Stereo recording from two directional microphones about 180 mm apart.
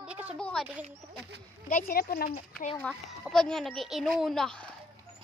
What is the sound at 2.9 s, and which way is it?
Speech, centre (ahead or behind).